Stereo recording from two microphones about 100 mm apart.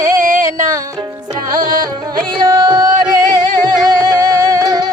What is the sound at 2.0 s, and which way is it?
Music, 50° right (ahead or behind).